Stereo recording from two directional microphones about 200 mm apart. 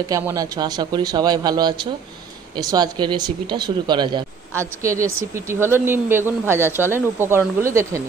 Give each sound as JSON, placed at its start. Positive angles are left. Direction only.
{"t": 0.1, "sound": "speech", "side_deg": -15}